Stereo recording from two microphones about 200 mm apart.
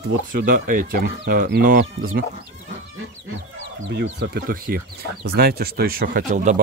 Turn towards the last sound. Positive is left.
turn(degrees=-35)  # may be behind; listen again after turning